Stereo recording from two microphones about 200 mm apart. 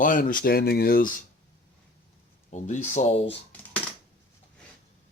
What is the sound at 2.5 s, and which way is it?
Speech, 35° left (ahead or behind).